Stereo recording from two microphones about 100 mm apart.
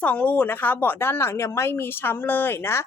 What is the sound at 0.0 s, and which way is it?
Speech, 15° left (ahead or behind).